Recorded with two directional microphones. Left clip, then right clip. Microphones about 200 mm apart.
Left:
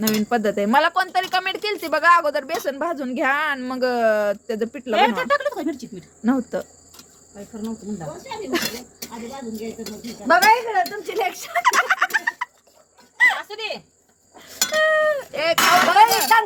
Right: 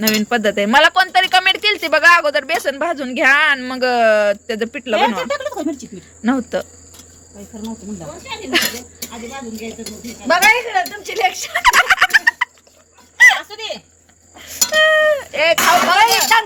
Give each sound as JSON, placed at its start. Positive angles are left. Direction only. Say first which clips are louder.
{"t": 0.0, "sound": "speech", "louder": "right 5 dB", "side_deg": 0}
{"t": 4.9, "sound": "speech", "louder": "right 1 dB", "side_deg": -15}
{"t": 6.2, "sound": "speech", "louder": "right 4 dB", "side_deg": 0}
{"t": 8.4, "sound": "speech", "louder": "right 8 dB", "side_deg": 0}
{"t": 10.2, "sound": "speech", "louder": "right 2 dB", "side_deg": 55}
{"t": 11.5, "sound": "turkey", "louder": "right 5 dB", "side_deg": 0}
{"t": 13.1, "sound": "dog", "louder": "right 7 dB", "side_deg": 0}
{"t": 14.3, "sound": "a sound", "louder": "right 6 dB", "side_deg": -5}
{"t": 16.3, "sound": "speech", "louder": "right 2 dB", "side_deg": 50}